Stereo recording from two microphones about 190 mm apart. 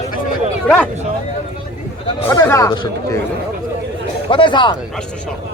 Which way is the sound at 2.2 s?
15° left (ahead or behind).